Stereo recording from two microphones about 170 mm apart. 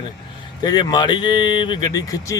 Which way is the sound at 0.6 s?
25° left (ahead or behind).